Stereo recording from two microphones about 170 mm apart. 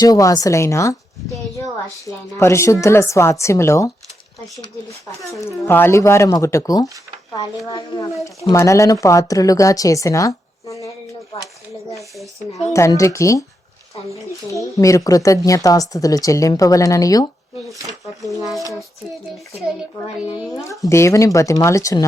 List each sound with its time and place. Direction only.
0.0 s speech: 20° left (ahead or behind)
2.0 s speech: 15° left (ahead or behind)
5.4 s speech: 15° left (ahead or behind)
11.9 s a child's voice: centre (ahead or behind)
12.7 s speech: 15° left (ahead or behind)
14.5 s speech: 20° left (ahead or behind)
18.3 s a child's voice: centre (ahead or behind)
20.9 s speech: 15° left (ahead or behind)